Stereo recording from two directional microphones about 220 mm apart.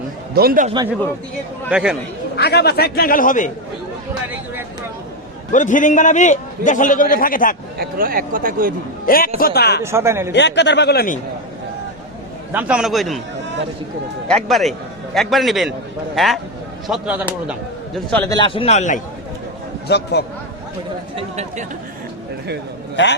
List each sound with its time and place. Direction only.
0.3 s speech: 40° right (ahead or behind)
1.7 s a man's voice: 5° right (ahead or behind)
2.3 s a man's voice: 45° left (ahead or behind)
5.5 s a man's voice: 35° left (ahead or behind)
7.8 s speech: 40° right (ahead or behind)
9.0 s a man's voice: 40° left (ahead or behind)
9.8 s a man's voice: 10° right (ahead or behind)
10.3 s a man's voice: 50° left (ahead or behind)
12.5 s a man's voice: 5° right (ahead or behind)
14.4 s a man's voice: centre (ahead or behind)
18.3 s a man's voice: 20° left (ahead or behind)
19.9 s a man's voice: 50° left (ahead or behind)
21.2 s speech: 30° right (ahead or behind)
23.0 s a man's voice: 55° left (ahead or behind)